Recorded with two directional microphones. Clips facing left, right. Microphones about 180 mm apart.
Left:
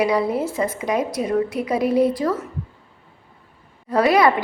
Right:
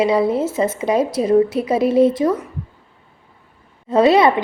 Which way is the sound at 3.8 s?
25° right (ahead or behind).